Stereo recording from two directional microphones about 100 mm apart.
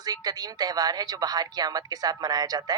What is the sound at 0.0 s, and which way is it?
Speech, 40° right (ahead or behind).